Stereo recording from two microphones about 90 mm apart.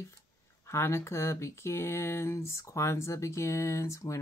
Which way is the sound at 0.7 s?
30° left (ahead or behind).